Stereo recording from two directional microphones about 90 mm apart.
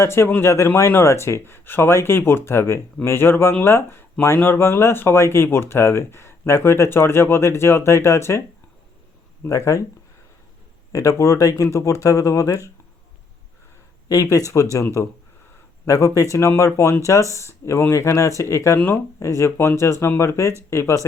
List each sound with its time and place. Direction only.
0.0 s speech: 30° left (ahead or behind)
9.5 s speech: 35° left (ahead or behind)
10.9 s speech: 35° left (ahead or behind)
14.1 s speech: 40° left (ahead or behind)
15.9 s speech: 35° left (ahead or behind)